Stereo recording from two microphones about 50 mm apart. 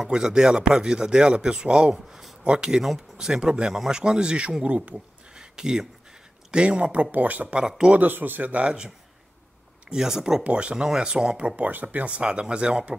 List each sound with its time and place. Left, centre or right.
0.0 s speech: centre
2.0 s speech: centre
2.4 s speech: centre
5.3 s a sound: centre
6.5 s speech: centre; by 7.4 s right
7.6 s speech: centre
7.9 s speech: right
8.6 s speech: centre
10.4 s speech: right